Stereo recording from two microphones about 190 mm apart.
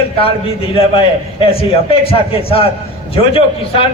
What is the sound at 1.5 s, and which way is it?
A man's voice, 30° left (ahead or behind).